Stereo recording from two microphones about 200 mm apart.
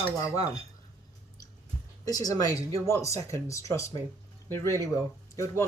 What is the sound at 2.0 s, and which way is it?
Speech, 20° left (ahead or behind).